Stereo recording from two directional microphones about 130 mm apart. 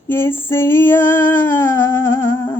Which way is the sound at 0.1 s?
15° left (ahead or behind).